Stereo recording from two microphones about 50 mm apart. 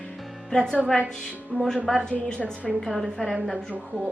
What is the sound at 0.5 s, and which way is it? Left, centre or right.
Speech, centre.